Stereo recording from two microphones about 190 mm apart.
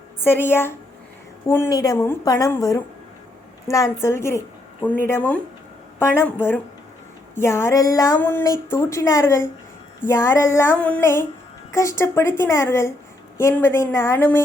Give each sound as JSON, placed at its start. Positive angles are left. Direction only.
{"t": 0.2, "sound": "child singing", "side_deg": 10}
{"t": 1.5, "sound": "a woman's voice", "side_deg": 15}
{"t": 3.7, "sound": "child singing", "side_deg": 15}
{"t": 4.0, "sound": "speech", "side_deg": 15}
{"t": 6.0, "sound": "child singing", "side_deg": 15}
{"t": 7.3, "sound": "child singing", "side_deg": 15}